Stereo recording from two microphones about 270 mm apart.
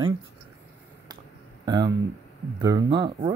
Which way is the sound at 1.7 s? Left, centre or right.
Centre.